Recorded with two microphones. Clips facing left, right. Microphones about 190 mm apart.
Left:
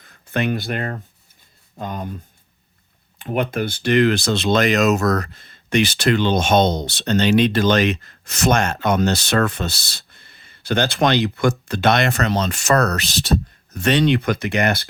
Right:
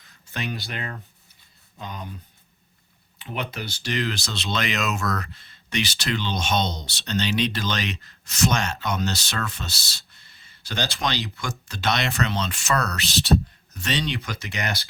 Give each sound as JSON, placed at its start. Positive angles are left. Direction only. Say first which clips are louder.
{"t": 0.0, "sound": "speech", "louder": "left 10 dB", "side_deg": 55}
{"t": 3.2, "sound": "speech", "louder": "left 10 dB", "side_deg": 50}